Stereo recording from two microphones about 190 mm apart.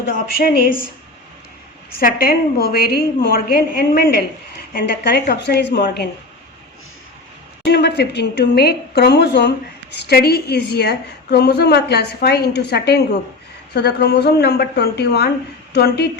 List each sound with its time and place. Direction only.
0.1 s a woman's voice: 55° left (ahead or behind)
2.0 s a woman's voice: 50° left (ahead or behind)
7.6 s a woman's voice: 60° left (ahead or behind)